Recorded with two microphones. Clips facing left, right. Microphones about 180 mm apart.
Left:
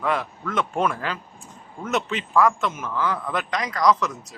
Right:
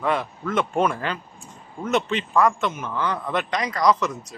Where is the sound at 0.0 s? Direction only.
Centre (ahead or behind).